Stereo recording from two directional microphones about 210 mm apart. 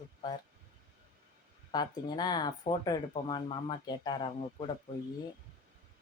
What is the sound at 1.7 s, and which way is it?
Speech, 20° left (ahead or behind).